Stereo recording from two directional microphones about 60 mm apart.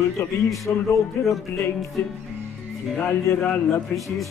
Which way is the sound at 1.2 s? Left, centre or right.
Left.